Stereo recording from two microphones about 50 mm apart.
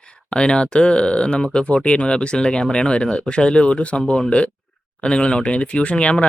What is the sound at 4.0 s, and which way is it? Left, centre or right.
Speech, centre.